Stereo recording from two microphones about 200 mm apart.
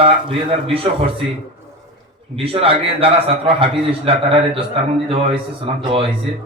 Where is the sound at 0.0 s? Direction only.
25° right (ahead or behind).